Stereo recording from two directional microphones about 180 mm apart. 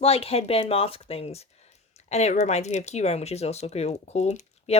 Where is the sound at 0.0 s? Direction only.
35° left (ahead or behind).